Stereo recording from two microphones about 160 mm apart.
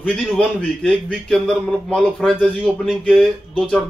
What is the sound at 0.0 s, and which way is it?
A man's voice, 10° left (ahead or behind).